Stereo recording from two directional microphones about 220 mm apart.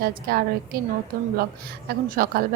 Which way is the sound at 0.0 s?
45° right (ahead or behind).